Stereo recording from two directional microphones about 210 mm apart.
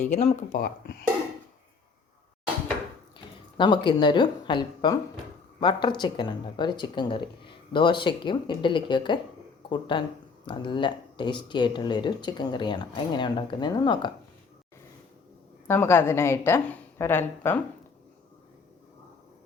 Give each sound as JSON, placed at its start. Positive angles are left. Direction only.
{"t": 0.0, "sound": "speech", "side_deg": 30}
{"t": 3.6, "sound": "speech", "side_deg": 20}
{"t": 15.6, "sound": "a woman's voice", "side_deg": 10}